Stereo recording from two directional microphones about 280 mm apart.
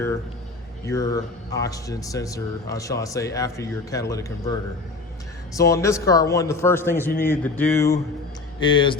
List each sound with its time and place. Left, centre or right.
0.9 s speech: centre
5.5 s speech: centre